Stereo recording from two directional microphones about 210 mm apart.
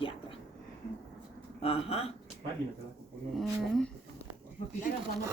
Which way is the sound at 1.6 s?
25° left (ahead or behind).